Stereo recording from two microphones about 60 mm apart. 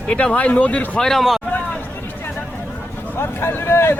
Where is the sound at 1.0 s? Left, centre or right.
Centre.